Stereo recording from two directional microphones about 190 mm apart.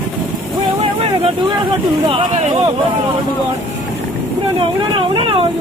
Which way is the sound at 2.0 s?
30° right (ahead or behind).